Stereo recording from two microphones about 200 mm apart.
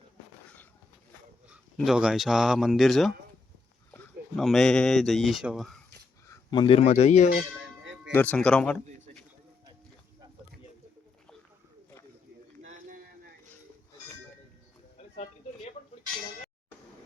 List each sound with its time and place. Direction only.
1.8 s speech: 5° right (ahead or behind)
6.2 s speech: 20° left (ahead or behind)
8.1 s speech: 10° left (ahead or behind)
14.9 s a sound: 40° left (ahead or behind)